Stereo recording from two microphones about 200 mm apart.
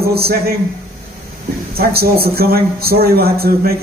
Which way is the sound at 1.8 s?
50° right (ahead or behind).